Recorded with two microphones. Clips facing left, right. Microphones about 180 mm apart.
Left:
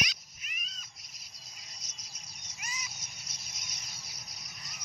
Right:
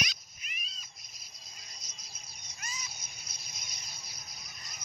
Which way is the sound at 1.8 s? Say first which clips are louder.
Right 1 dB; 90° left.